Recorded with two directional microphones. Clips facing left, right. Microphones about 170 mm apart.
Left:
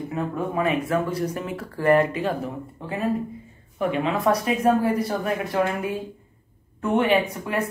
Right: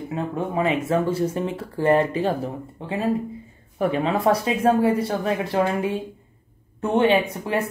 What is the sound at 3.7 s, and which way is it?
Speech, 35° right (ahead or behind).